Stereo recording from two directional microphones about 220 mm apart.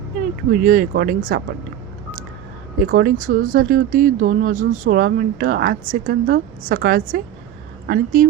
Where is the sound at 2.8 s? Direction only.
40° right (ahead or behind).